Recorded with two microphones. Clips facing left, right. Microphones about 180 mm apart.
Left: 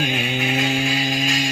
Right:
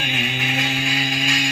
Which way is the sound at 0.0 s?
35° left (ahead or behind).